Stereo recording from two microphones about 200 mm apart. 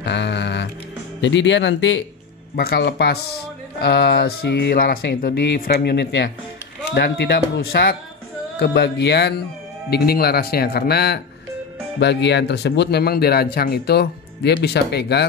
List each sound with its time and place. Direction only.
0.0 s music: 60° left (ahead or behind)
1.2 s speech: 65° left (ahead or behind)
2.5 s speech: 50° left (ahead or behind)